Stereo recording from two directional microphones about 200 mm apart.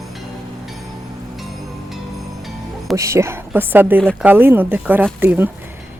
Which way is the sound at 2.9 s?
15° right (ahead or behind).